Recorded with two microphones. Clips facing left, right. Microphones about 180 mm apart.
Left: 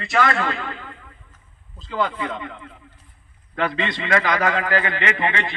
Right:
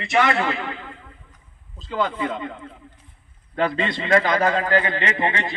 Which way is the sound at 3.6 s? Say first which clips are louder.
Right 1 dB; 25° right (ahead or behind).